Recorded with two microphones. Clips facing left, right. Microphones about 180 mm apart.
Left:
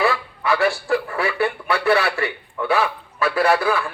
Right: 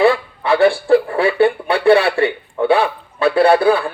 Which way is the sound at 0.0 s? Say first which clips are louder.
Right 7 dB; 30° right (ahead or behind).